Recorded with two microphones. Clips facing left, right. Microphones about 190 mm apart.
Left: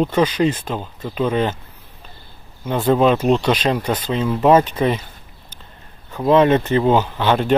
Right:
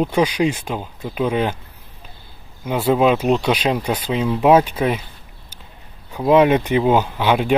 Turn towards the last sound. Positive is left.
turn(degrees=-10)  # may be behind; listen again after turning